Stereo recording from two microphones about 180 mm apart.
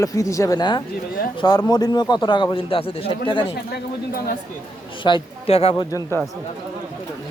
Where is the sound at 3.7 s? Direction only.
55° left (ahead or behind).